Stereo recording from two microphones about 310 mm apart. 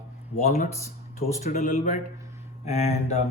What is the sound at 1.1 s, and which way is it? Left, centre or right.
Speech, left.